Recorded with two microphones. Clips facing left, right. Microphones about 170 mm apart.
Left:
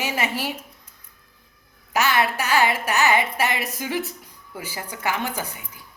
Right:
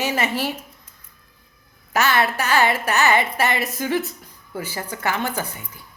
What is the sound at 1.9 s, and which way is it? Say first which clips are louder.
A woman's voice: right 1 dB; 10° left (ahead or behind).